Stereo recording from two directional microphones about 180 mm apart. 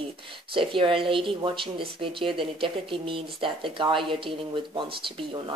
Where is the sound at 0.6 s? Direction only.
30° right (ahead or behind).